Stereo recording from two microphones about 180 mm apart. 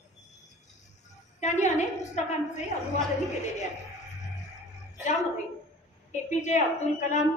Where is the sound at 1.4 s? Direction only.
40° left (ahead or behind).